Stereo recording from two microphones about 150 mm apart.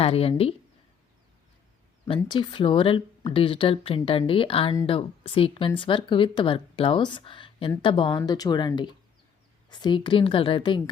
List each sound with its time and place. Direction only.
0.0 s speech: 40° left (ahead or behind)
2.0 s speech: 30° left (ahead or behind)